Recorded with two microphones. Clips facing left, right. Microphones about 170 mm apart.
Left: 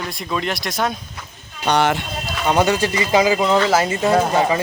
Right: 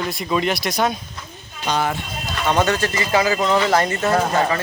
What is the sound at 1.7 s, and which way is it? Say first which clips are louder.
Speech: left 4 dB; 75° left (ahead or behind).